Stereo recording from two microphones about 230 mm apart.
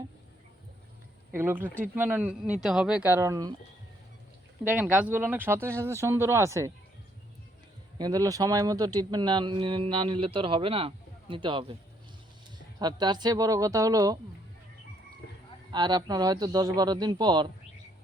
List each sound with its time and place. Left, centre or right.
1.3 s speech: centre
4.6 s speech: centre
7.9 s speech: centre
12.8 s speech: centre
15.7 s speech: centre